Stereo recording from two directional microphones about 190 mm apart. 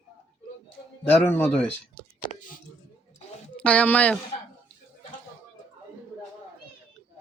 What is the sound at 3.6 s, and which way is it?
Speech, 5° left (ahead or behind).